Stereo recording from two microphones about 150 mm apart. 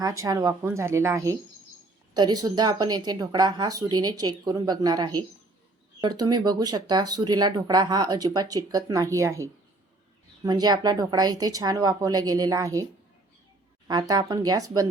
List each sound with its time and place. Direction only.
0.0 s speech: 20° right (ahead or behind)